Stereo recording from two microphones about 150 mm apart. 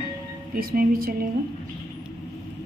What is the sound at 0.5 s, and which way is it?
Speech, 75° right (ahead or behind).